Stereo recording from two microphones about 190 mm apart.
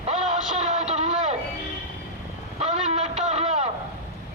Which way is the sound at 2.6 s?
35° right (ahead or behind).